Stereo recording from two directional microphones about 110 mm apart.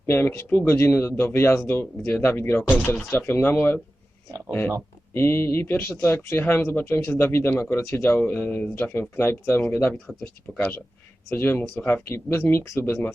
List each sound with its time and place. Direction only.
0.0 s speech: 20° left (ahead or behind)
5.1 s speech: 20° left (ahead or behind)
11.3 s speech: 20° left (ahead or behind)